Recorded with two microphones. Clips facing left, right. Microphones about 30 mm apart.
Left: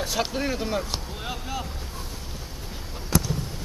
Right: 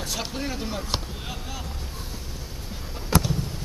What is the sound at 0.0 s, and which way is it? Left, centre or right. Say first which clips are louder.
Speech: left 4 dB; centre.